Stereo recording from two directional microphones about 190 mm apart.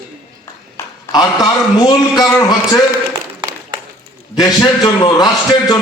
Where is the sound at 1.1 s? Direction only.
20° left (ahead or behind).